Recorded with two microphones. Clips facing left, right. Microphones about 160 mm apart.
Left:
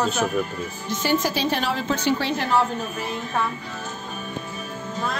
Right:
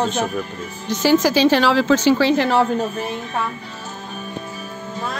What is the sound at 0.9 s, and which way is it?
A woman's voice, 90° right.